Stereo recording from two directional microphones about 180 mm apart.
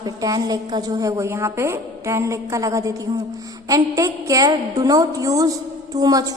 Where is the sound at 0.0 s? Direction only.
20° right (ahead or behind).